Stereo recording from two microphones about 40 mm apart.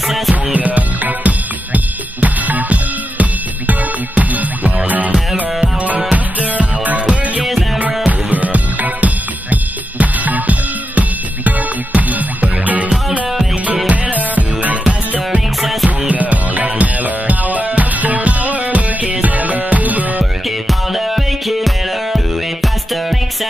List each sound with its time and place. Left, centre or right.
0.3 s music: right
6.1 s music: right
7.4 s music: centre
8.3 s music: right
13.8 s music: right
20.4 s music: centre